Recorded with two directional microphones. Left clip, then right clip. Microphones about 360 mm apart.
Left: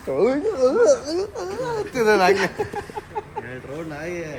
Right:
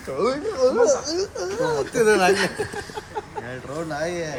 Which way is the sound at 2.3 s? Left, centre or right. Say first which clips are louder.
Left 1 dB; centre.